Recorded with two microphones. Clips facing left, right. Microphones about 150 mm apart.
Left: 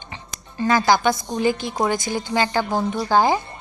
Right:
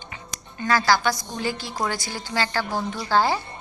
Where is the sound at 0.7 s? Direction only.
20° left (ahead or behind).